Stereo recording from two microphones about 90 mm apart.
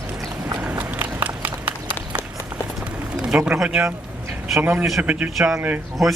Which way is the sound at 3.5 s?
10° right (ahead or behind).